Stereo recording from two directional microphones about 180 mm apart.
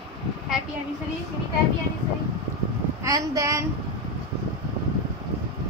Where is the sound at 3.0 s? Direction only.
20° right (ahead or behind).